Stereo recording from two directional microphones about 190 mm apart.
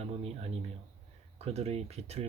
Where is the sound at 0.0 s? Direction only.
30° right (ahead or behind).